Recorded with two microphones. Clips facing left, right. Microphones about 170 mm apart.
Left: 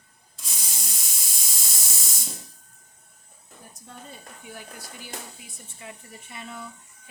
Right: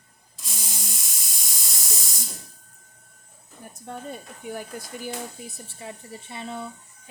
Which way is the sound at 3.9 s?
55° right (ahead or behind).